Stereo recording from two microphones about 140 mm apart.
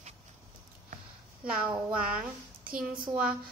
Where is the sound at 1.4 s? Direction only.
10° right (ahead or behind).